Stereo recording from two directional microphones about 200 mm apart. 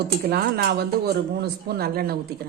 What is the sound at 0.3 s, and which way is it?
Speech, 50° right (ahead or behind).